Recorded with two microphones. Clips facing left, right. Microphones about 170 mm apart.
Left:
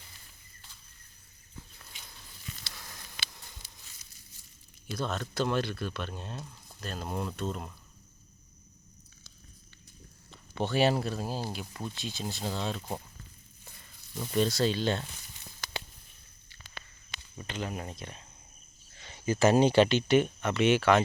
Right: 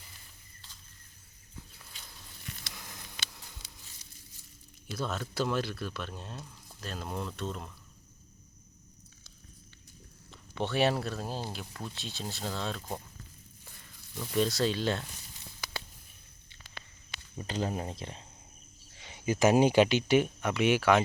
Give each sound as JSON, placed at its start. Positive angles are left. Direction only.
{"t": 4.9, "sound": "speech", "side_deg": -5}
{"t": 10.5, "sound": "speech", "side_deg": 0}
{"t": 14.3, "sound": "speech", "side_deg": 0}
{"t": 17.3, "sound": "speech", "side_deg": -35}
{"t": 18.9, "sound": "speech", "side_deg": -10}